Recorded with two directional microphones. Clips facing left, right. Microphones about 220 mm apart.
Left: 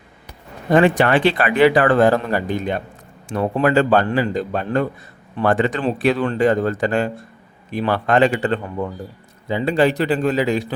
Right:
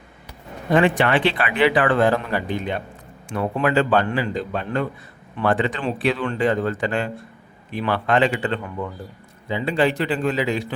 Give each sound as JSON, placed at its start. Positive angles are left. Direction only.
{"t": 0.7, "sound": "a man's voice", "side_deg": 40}